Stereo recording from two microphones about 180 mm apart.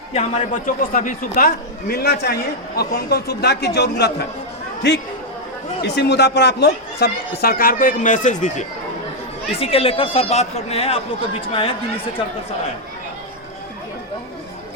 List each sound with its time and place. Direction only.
0.1 s a man's voice: 40° left (ahead or behind); by 4.3 s 65° left (ahead or behind)
5.8 s a man's voice: 70° left (ahead or behind); by 8.6 s 40° left (ahead or behind)
9.5 s speech: 30° left (ahead or behind)